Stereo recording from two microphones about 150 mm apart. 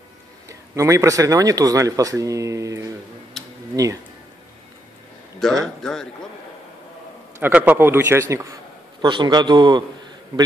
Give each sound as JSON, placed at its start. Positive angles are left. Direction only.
{"t": 0.5, "sound": "speech", "side_deg": -20}
{"t": 3.4, "sound": "tick-tock", "side_deg": 0}
{"t": 3.7, "sound": "speech", "side_deg": -25}
{"t": 5.4, "sound": "a man's voice", "side_deg": 0}
{"t": 7.3, "sound": "a man's voice", "side_deg": -10}
{"t": 9.0, "sound": "a man's voice", "side_deg": -30}